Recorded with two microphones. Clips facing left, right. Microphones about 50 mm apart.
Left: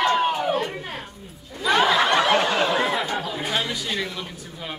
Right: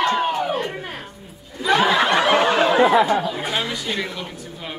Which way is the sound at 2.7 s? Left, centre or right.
Right.